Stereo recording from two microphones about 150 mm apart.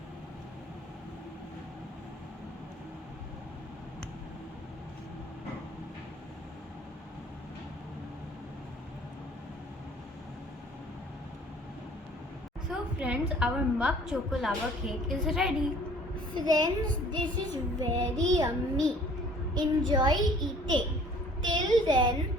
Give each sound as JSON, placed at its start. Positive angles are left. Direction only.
{"t": 13.0, "sound": "a woman's voice", "side_deg": -5}
{"t": 16.3, "sound": "a child's voice", "side_deg": -25}
{"t": 21.4, "sound": "a sound", "side_deg": -30}